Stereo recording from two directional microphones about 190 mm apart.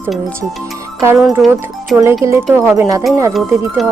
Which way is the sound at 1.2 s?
5° right (ahead or behind).